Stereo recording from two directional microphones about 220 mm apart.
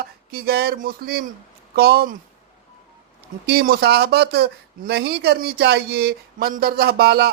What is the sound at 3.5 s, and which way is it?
Speech, 45° right (ahead or behind).